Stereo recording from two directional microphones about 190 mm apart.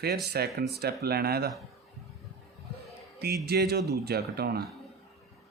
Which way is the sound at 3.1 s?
55° right (ahead or behind).